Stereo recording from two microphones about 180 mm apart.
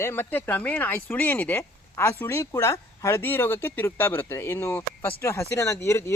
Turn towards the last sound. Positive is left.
turn(degrees=15)  # may be behind; listen again after turning